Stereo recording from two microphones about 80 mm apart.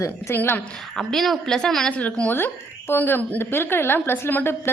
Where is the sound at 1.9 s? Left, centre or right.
Centre.